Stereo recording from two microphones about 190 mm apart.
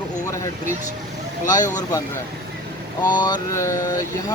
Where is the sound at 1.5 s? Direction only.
20° left (ahead or behind).